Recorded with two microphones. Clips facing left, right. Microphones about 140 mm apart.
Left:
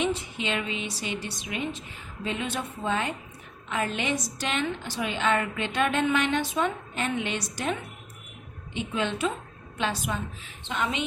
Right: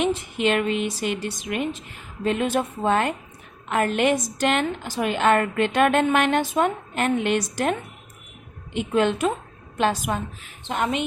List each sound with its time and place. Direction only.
0.0 s a woman's voice: 55° right (ahead or behind)